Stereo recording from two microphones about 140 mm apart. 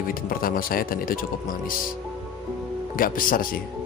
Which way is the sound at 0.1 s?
90° left.